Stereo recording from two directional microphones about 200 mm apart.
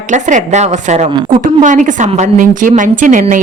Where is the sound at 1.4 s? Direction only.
40° right (ahead or behind).